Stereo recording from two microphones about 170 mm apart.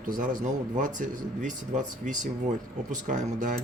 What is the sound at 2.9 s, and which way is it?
Speech, 50° right (ahead or behind).